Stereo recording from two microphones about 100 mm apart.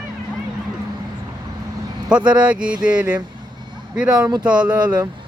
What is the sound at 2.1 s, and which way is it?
Speech, 10° right (ahead or behind).